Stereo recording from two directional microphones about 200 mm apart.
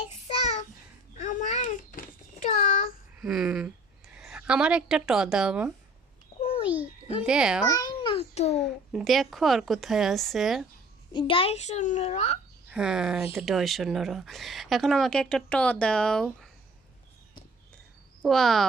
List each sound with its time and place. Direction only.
0.1 s child singing: 30° left (ahead or behind)
1.2 s a sound: 40° left (ahead or behind)
2.4 s child singing: 35° left (ahead or behind)
3.2 s a woman's voice: 5° right (ahead or behind)
6.3 s babbling: 45° left (ahead or behind)
7.3 s speech: 5° right (ahead or behind)
7.7 s babbling: 20° left (ahead or behind)
8.5 s speech: centre (ahead or behind)
11.1 s a child's voice: 25° left (ahead or behind)
12.7 s speech: 5° right (ahead or behind)
18.2 s speech: centre (ahead or behind)